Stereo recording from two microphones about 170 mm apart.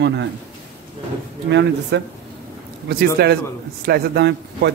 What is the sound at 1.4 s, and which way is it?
Speech, 90° right.